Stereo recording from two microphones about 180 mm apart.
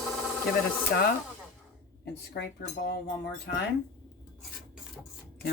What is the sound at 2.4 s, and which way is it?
Speech, 70° left (ahead or behind).